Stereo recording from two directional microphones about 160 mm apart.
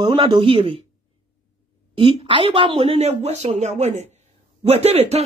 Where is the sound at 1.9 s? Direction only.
30° right (ahead or behind).